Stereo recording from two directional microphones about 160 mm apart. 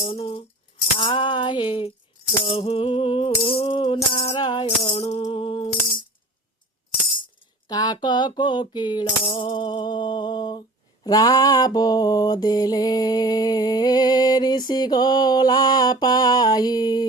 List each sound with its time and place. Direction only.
0.0 s music: 40° left (ahead or behind)
7.7 s mantra: 25° left (ahead or behind)